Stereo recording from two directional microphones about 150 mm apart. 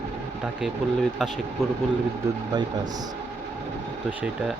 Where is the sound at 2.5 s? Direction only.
25° right (ahead or behind).